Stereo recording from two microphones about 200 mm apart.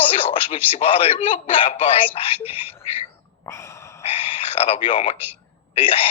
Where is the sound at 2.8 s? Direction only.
30° left (ahead or behind).